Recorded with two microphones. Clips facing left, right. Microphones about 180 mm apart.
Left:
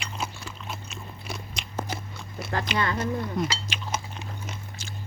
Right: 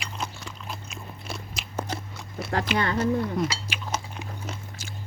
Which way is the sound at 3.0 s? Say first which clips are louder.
Right 3 dB; 5° right (ahead or behind).